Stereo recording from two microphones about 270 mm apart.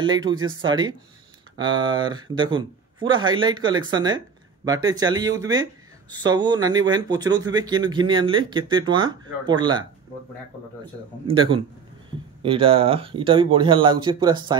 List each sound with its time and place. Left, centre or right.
0.0 s speech: centre
11.2 s speech: centre